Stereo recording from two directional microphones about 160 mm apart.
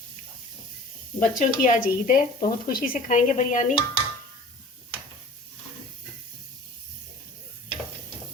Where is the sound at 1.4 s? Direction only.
55° left (ahead or behind).